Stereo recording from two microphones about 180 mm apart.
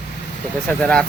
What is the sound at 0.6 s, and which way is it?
Speech, 5° left (ahead or behind).